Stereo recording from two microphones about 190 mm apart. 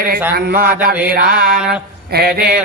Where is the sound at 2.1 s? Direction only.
55° right (ahead or behind).